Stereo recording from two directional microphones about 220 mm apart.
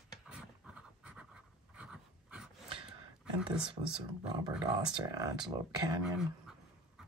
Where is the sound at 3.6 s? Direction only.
20° right (ahead or behind).